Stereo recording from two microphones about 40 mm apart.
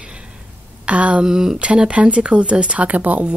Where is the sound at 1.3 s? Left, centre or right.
Centre.